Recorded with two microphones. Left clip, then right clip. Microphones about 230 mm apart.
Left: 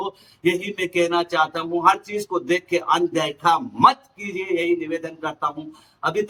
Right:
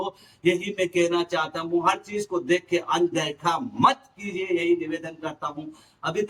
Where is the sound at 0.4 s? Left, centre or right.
Centre.